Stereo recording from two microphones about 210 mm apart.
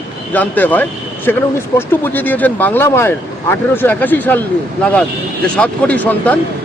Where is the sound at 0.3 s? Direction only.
10° left (ahead or behind).